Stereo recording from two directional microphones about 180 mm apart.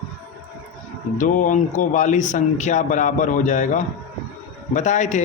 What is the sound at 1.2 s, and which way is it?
Speech, 45° left (ahead or behind).